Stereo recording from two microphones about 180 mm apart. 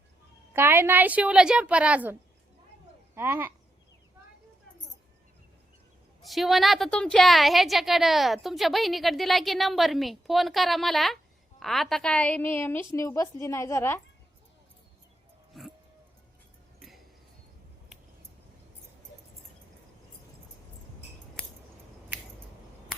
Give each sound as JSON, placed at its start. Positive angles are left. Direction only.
{"t": 0.5, "sound": "a woman's voice", "side_deg": -15}
{"t": 3.2, "sound": "a woman's voice", "side_deg": -15}
{"t": 6.2, "sound": "a woman's voice", "side_deg": 0}